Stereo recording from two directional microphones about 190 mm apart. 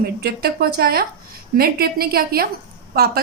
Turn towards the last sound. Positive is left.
turn(degrees=-55)  # may be behind; listen again after turning